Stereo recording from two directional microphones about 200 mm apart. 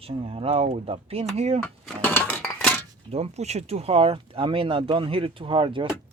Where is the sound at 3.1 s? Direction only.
30° right (ahead or behind).